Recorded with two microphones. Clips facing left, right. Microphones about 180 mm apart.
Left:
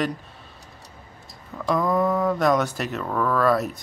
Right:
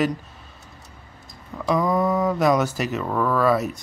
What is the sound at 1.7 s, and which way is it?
Speech, centre (ahead or behind).